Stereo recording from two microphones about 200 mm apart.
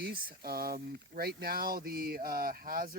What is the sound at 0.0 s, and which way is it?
Speech, 50° right (ahead or behind).